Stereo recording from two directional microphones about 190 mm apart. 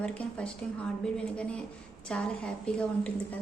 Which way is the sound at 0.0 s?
5° left (ahead or behind).